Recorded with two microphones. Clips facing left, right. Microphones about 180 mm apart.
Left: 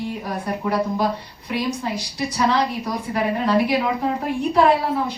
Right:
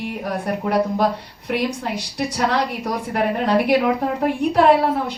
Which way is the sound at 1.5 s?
65° right (ahead or behind).